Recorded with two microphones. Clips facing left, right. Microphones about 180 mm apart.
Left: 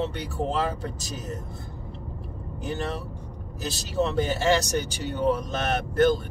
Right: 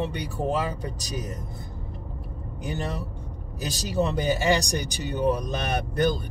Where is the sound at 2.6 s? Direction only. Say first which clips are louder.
Left 1 dB; 15° right (ahead or behind).